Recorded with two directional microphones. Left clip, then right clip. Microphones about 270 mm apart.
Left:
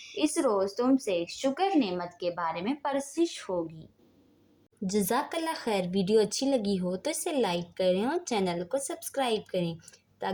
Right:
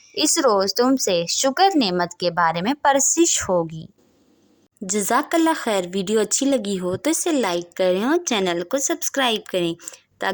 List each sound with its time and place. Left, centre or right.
0.2 s speech: right
4.9 s speech: right